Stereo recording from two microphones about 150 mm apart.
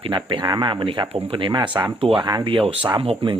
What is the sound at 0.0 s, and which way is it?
Speech, 35° right (ahead or behind).